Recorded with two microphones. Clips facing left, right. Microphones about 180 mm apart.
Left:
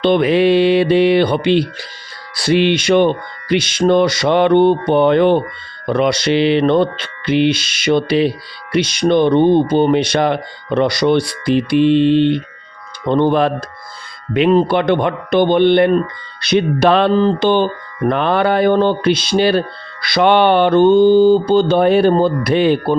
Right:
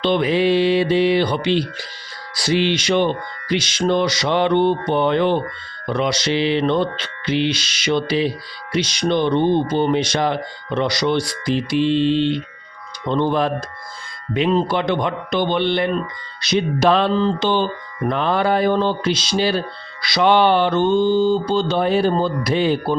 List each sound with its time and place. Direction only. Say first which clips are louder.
0.0 s speech: left 5 dB; 60° left (ahead or behind)